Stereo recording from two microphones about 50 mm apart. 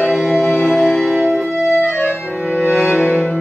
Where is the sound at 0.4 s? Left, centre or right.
Left.